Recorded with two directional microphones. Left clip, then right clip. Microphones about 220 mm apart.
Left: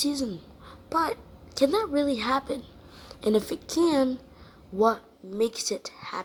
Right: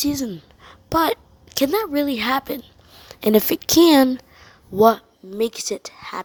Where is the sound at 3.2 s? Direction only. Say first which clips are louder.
Right 8 dB; 40° right (ahead or behind).